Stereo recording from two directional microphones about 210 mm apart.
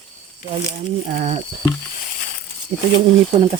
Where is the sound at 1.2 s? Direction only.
30° right (ahead or behind).